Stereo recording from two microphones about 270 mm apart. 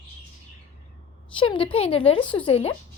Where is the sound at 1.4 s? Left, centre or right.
Centre.